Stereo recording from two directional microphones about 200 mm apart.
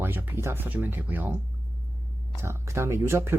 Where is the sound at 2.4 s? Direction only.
15° right (ahead or behind).